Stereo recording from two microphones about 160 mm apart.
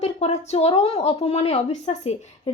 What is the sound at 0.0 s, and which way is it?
Speech, 40° left (ahead or behind).